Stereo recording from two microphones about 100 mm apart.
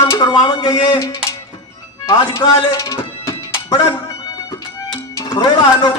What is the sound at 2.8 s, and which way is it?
Music, 30° left (ahead or behind).